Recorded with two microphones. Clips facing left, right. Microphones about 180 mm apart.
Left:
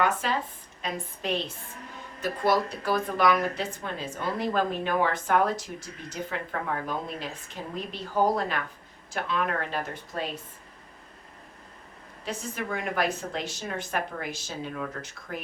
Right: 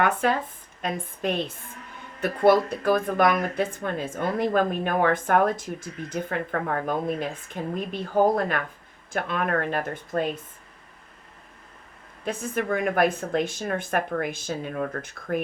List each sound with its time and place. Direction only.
0.0 s speech: 55° right (ahead or behind)
12.2 s speech: 55° right (ahead or behind)